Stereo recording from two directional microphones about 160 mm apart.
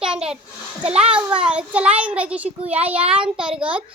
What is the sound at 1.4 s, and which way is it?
A child's voice, 10° right (ahead or behind).